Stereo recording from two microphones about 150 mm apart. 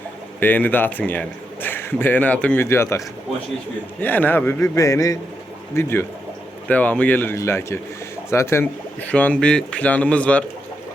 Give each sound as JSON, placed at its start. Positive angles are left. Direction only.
{"t": 0.3, "sound": "a man's voice", "side_deg": 10}
{"t": 4.0, "sound": "a man's voice", "side_deg": 10}